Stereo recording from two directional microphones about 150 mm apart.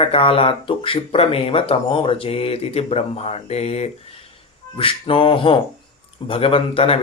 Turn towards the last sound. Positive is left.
turn(degrees=40)  # may be behind; listen again after turning